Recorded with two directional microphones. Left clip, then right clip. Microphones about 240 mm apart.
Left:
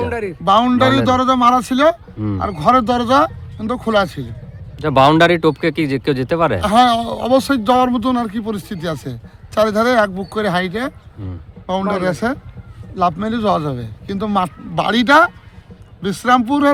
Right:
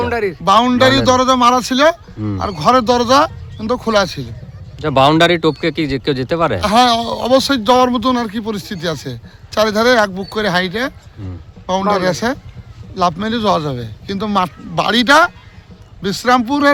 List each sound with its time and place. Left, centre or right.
0.0 s a sound: right
0.4 s speech: centre
4.8 s speech: centre